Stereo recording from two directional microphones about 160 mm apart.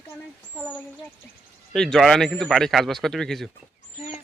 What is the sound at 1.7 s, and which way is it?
Speech, 5° left (ahead or behind).